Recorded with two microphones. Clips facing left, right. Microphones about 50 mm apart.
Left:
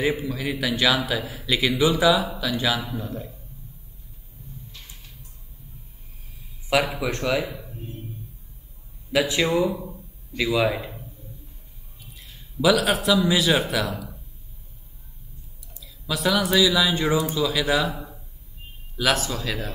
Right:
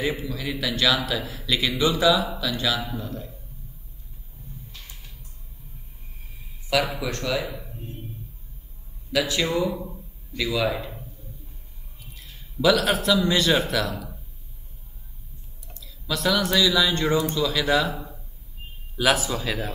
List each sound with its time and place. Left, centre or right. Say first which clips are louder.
0.0 s speech: left 3 dB; centre
3.0 s speech: left 1 dB; left
6.7 s speech: left 2 dB; centre
9.1 s speech: left 2 dB; centre
12.6 s a man's voice: left 1 dB; centre
15.7 s a man's voice: even; centre